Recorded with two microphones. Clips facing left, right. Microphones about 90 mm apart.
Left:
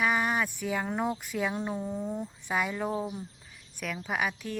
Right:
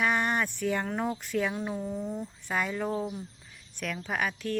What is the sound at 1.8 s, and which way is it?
Speech, 20° left (ahead or behind).